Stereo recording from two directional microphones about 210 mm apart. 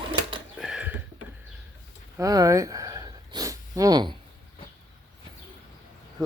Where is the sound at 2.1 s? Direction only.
15° right (ahead or behind).